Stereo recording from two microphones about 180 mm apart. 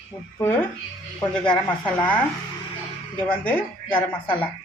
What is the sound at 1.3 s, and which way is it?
Speech, 5° left (ahead or behind).